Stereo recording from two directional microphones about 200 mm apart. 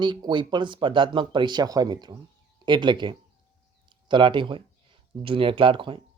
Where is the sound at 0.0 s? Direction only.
20° right (ahead or behind).